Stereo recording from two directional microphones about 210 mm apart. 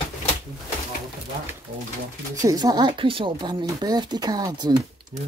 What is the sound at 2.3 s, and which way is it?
Speech, 15° right (ahead or behind).